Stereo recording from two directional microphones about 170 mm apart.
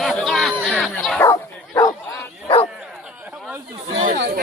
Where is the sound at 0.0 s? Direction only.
Centre (ahead or behind); by 2.0 s 20° left (ahead or behind).